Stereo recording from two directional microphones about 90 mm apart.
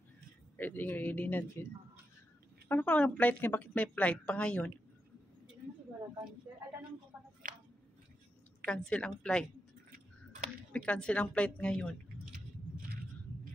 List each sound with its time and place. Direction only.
0.6 s speech: 20° left (ahead or behind)
2.7 s a woman's voice: 15° left (ahead or behind)
8.6 s a woman's voice: 10° left (ahead or behind)
10.7 s a woman's voice: 10° left (ahead or behind)